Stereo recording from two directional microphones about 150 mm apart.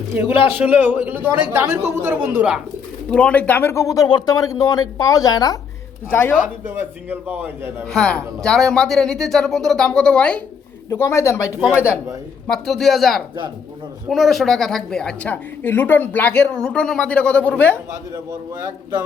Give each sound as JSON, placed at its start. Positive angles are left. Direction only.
{"t": 0.1, "sound": "a man's voice", "side_deg": -10}
{"t": 3.1, "sound": "speech", "side_deg": 10}
{"t": 6.1, "sound": "a woman's voice", "side_deg": 15}
{"t": 6.4, "sound": "a man's voice", "side_deg": -10}
{"t": 7.9, "sound": "speech", "side_deg": 5}
{"t": 10.8, "sound": "speech", "side_deg": 20}
{"t": 11.8, "sound": "a man's voice", "side_deg": -10}
{"t": 12.5, "sound": "a woman's voice", "side_deg": 0}